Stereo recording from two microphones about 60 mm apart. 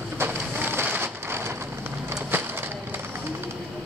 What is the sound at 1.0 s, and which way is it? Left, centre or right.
Rain, right.